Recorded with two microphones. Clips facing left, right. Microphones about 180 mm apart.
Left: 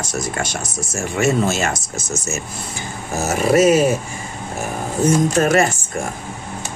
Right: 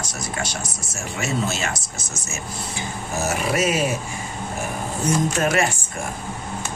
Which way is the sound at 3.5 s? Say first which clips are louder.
Left 10 dB; 40° left (ahead or behind).